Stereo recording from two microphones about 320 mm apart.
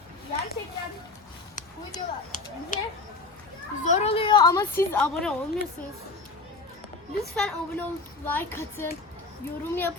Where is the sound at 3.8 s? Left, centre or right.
Left; by 5.3 s centre.